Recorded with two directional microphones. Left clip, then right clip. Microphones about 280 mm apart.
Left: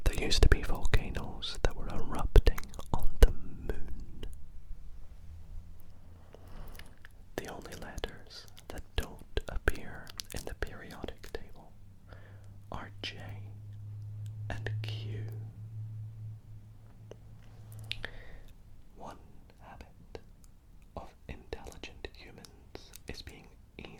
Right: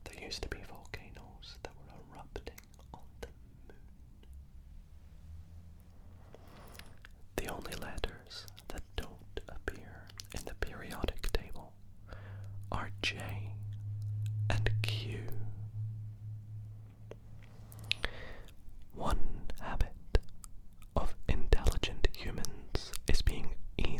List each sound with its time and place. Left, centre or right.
0.0 s whispering: left
6.3 s whispering: centre
9.0 s whispering: centre
10.2 s whispering: centre
10.8 s whispering: centre
17.7 s a sound: right
18.9 s whispering: right